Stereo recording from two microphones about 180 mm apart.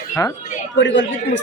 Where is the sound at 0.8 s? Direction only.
90° left.